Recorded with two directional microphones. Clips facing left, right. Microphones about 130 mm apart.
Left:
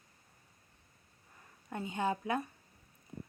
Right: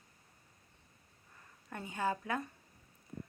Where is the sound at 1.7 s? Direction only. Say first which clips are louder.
Left 2 dB; 20° left (ahead or behind).